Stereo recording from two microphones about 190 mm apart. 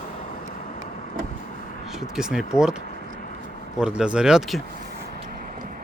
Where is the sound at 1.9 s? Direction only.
Centre (ahead or behind).